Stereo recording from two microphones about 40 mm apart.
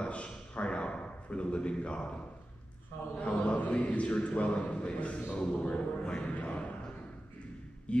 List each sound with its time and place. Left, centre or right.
0.0 s a sound: left
3.2 s a man's voice: left
7.9 s speech: left